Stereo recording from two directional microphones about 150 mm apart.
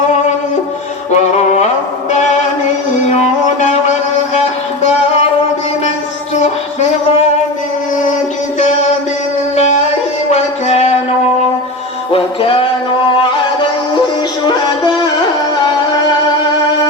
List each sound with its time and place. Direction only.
1.1 s music: 50° left (ahead or behind)
10.3 s music: 50° left (ahead or behind)
12.1 s music: 35° left (ahead or behind)